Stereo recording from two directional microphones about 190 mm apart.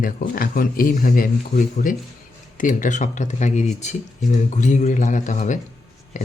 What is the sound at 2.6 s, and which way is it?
Speech, 45° left (ahead or behind).